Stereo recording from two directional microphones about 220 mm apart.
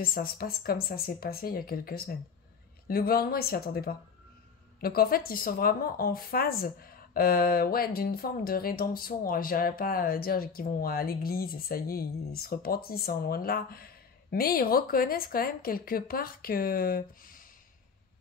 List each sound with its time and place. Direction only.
0.0 s speech: 40° left (ahead or behind)